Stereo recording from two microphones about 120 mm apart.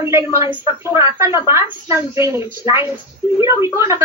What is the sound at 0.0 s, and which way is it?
A woman's voice, 20° right (ahead or behind).